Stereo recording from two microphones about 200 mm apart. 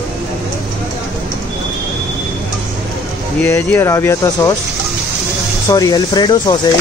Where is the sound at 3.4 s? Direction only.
10° left (ahead or behind).